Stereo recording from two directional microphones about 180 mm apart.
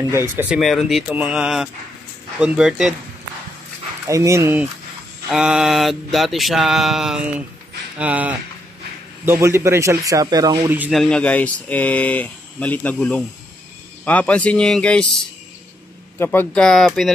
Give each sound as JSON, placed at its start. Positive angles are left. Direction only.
{"t": 0.1, "sound": "speech", "side_deg": -10}
{"t": 0.6, "sound": "mantra", "side_deg": 0}
{"t": 4.1, "sound": "speech", "side_deg": -15}
{"t": 5.3, "sound": "mantra", "side_deg": -5}
{"t": 8.0, "sound": "speech", "side_deg": -10}
{"t": 9.4, "sound": "speech", "side_deg": -15}
{"t": 10.7, "sound": "speech", "side_deg": -10}
{"t": 11.0, "sound": "speech", "side_deg": 5}
{"t": 16.2, "sound": "mantra", "side_deg": 10}